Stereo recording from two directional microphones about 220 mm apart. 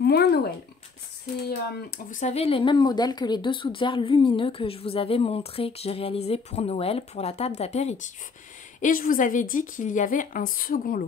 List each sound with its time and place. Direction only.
0.0 s speech: 45° left (ahead or behind)
2.0 s a woman's voice: 35° left (ahead or behind)